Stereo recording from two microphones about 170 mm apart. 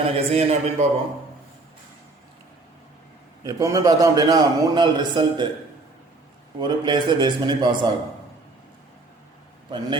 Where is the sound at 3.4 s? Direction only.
20° right (ahead or behind).